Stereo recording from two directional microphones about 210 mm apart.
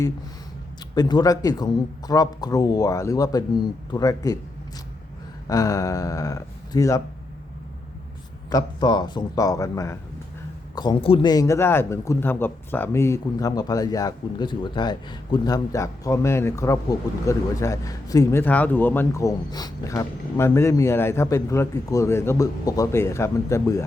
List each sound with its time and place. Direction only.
0.9 s speech: 20° left (ahead or behind)
5.5 s speech: 15° left (ahead or behind)
8.4 s speech: 20° left (ahead or behind)